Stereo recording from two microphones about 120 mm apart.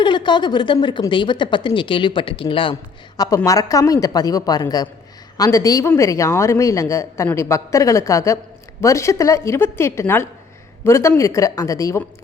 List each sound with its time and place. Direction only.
0.0 s a woman's voice: 40° left (ahead or behind)
3.2 s speech: 30° left (ahead or behind)